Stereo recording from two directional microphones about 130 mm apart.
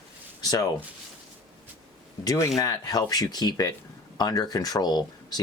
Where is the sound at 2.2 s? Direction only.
30° left (ahead or behind).